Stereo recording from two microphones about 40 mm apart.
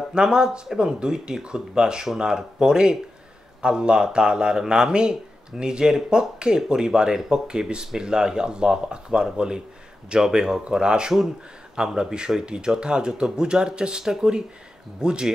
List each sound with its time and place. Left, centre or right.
0.1 s speech: centre